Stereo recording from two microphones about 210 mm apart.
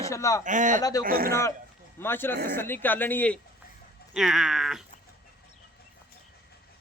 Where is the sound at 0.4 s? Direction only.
35° right (ahead or behind).